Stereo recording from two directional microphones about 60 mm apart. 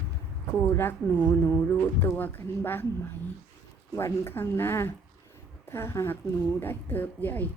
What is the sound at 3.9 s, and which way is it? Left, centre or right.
A woman's voice, left.